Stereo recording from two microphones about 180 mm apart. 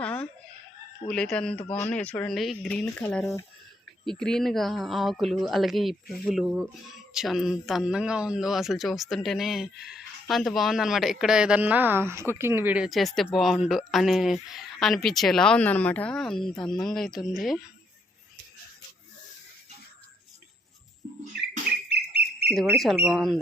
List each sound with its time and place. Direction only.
0.0 s a sound: 5° left (ahead or behind)
1.0 s speech: 5° left (ahead or behind)
2.8 s speech: 15° left (ahead or behind)
3.1 s speech: centre (ahead or behind)
22.4 s speech: 5° right (ahead or behind)